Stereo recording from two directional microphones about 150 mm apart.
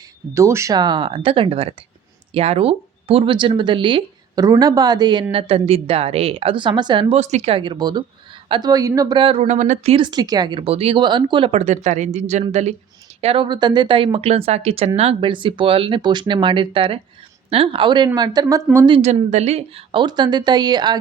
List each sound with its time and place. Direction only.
0.3 s speech: 20° right (ahead or behind)
7.2 s speech: 50° right (ahead or behind)
9.9 s speech: 30° right (ahead or behind); by 12.7 s 45° right (ahead or behind)
13.2 s a woman's voice: 35° right (ahead or behind); by 18.9 s 20° right (ahead or behind)
18.9 s speech: 35° right (ahead or behind)
19.3 s a woman's voice: 45° right (ahead or behind); by 21.0 s 30° right (ahead or behind)